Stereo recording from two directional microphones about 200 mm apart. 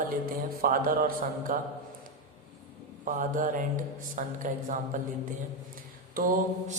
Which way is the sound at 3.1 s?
40° right (ahead or behind).